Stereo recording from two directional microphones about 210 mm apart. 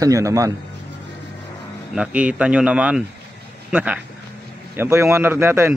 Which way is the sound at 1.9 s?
5° right (ahead or behind).